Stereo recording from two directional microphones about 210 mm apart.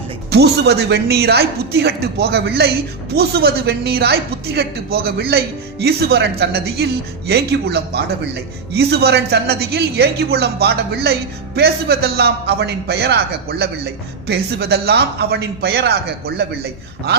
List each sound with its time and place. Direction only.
0.3 s a woman's voice: 50° right (ahead or behind)